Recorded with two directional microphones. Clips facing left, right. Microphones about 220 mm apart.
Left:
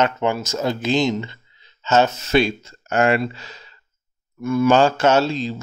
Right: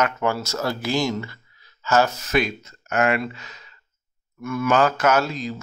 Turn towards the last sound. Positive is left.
turn(degrees=25)  # may be behind; listen again after turning